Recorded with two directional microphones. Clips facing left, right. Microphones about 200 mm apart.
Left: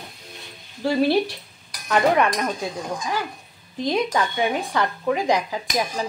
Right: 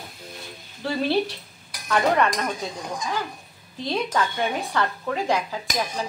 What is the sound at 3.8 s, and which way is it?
A woman's voice, 15° left (ahead or behind).